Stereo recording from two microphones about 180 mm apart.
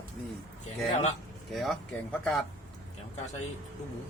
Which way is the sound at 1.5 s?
Centre (ahead or behind).